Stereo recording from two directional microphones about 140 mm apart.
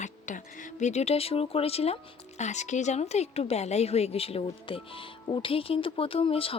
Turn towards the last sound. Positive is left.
turn(degrees=40)  # may be behind; listen again after turning